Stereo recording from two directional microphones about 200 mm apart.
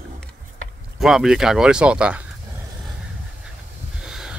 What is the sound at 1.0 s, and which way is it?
Speech, centre (ahead or behind).